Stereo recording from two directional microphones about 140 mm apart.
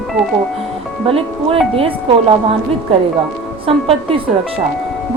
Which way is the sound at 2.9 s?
45° right (ahead or behind).